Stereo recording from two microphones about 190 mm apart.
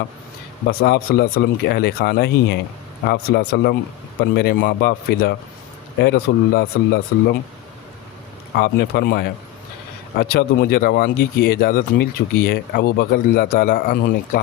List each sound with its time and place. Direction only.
0.7 s speech: 55° left (ahead or behind)
8.5 s speech: 60° left (ahead or behind)